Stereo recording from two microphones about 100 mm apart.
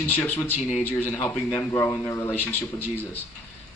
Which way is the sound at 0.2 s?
20° left (ahead or behind).